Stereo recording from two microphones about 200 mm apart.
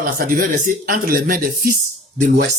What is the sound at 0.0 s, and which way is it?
Speech, 45° right (ahead or behind).